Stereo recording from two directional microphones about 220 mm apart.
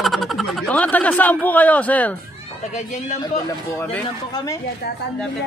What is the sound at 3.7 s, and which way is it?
Speech, 10° left (ahead or behind).